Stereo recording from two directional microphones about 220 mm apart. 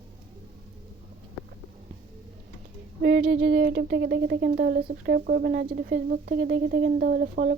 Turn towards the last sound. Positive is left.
turn(degrees=-40)  # may be behind; listen again after turning